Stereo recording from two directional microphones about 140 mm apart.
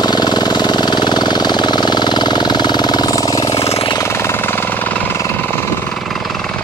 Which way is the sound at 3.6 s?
45° left (ahead or behind).